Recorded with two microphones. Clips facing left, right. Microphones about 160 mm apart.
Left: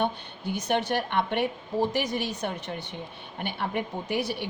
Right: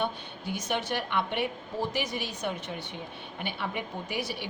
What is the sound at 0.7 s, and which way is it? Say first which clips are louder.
A woman's voice: left 4 dB; 50° left (ahead or behind).